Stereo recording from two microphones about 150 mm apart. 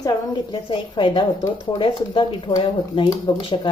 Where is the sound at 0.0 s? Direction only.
25° left (ahead or behind).